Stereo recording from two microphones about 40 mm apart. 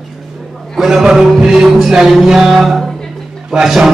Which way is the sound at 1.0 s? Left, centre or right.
Centre.